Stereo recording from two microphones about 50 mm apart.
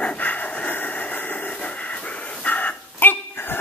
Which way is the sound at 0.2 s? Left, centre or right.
Left.